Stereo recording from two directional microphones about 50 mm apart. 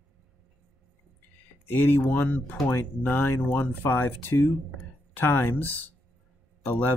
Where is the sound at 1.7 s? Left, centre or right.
Left.